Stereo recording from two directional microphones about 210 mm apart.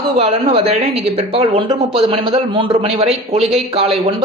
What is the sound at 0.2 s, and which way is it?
Speech, 30° right (ahead or behind).